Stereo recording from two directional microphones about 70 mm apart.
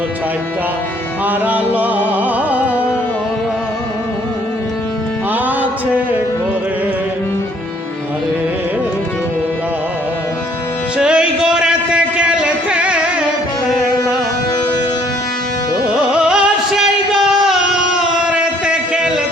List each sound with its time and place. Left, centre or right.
1.3 s music: right
10.9 s music: centre
15.9 s music: centre
18.3 s a sound: centre